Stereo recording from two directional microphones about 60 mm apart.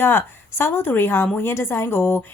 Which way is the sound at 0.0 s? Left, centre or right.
Left.